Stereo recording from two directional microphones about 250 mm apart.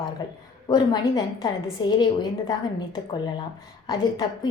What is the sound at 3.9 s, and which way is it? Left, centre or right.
Speech, centre.